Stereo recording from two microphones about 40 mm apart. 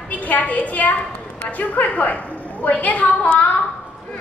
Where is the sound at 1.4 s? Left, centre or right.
Left.